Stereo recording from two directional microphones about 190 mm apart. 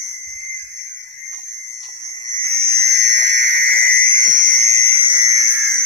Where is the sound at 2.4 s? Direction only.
50° right (ahead or behind); by 5.5 s 20° right (ahead or behind).